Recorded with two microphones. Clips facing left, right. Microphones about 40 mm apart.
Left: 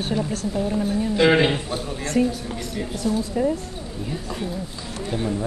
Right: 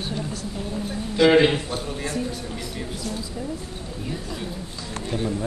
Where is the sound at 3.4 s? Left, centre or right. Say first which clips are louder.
Left 11 dB; left.